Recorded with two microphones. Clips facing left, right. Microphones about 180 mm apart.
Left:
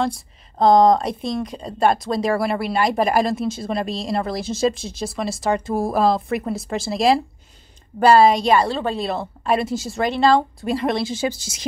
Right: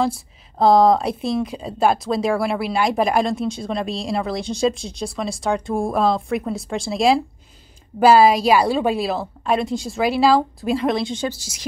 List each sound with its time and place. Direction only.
0.0 s speech: 5° right (ahead or behind)
11.2 s a woman's voice: 20° left (ahead or behind)